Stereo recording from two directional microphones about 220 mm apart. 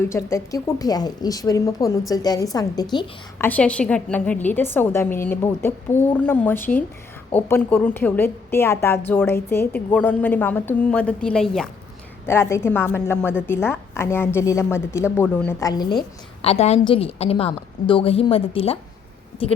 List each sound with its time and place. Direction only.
0.0 s a woman's voice: 10° left (ahead or behind)